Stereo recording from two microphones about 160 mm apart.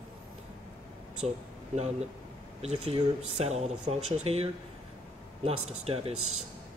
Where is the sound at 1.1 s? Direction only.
45° right (ahead or behind).